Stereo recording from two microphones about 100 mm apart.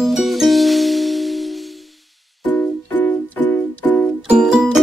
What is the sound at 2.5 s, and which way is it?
Music, 20° left (ahead or behind).